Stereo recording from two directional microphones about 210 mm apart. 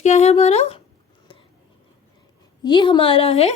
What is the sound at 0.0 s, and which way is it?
Speech, 35° left (ahead or behind).